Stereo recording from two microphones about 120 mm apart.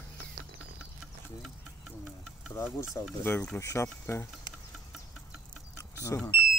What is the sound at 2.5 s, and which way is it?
Speech, 25° left (ahead or behind).